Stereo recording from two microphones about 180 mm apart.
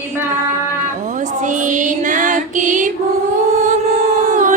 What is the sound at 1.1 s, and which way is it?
Female singing, 45° right (ahead or behind).